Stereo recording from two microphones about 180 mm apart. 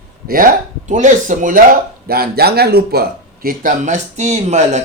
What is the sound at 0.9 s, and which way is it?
Speech, 45° right (ahead or behind).